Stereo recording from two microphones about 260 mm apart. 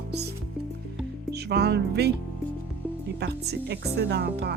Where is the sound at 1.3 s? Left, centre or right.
Right.